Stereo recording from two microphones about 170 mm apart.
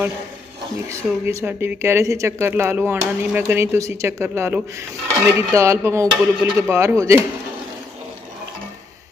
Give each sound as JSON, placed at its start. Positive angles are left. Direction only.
{"t": 0.8, "sound": "speech", "side_deg": -15}